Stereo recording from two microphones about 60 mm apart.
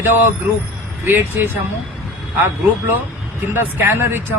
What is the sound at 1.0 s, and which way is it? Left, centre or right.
Speech, right.